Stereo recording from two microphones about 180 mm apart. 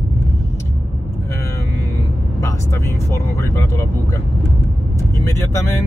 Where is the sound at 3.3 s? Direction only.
15° left (ahead or behind).